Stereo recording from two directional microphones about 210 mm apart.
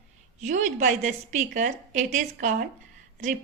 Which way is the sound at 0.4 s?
35° right (ahead or behind).